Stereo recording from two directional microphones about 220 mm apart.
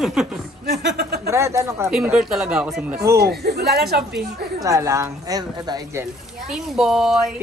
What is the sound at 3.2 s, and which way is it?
Speech, 45° right (ahead or behind).